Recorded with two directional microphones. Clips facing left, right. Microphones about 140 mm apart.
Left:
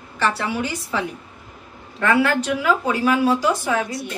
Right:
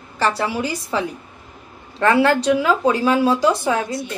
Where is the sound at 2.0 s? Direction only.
35° right (ahead or behind).